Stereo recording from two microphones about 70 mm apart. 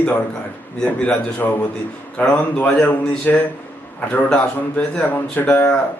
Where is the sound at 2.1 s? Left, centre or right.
Centre.